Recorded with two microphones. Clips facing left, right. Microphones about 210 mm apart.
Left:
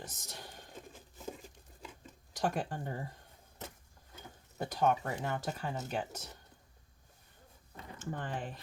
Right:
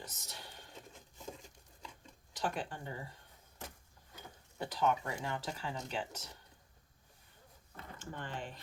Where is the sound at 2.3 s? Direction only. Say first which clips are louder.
Left 4 dB; 45° left (ahead or behind).